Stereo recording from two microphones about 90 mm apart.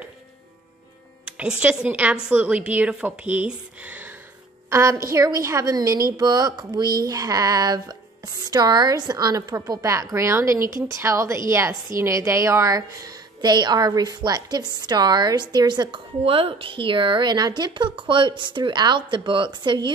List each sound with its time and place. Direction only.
1.6 s a woman's voice: 15° right (ahead or behind)
4.6 s a woman's voice: 35° right (ahead or behind); by 19.9 s 65° right (ahead or behind)